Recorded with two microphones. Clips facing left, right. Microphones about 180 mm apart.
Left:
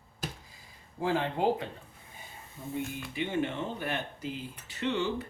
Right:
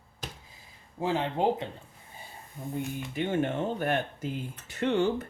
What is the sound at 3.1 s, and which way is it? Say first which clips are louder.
Speech: right 3 dB; 45° right (ahead or behind).